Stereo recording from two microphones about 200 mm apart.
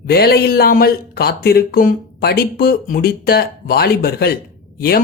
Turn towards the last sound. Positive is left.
turn(degrees=50)  # may be behind; listen again after turning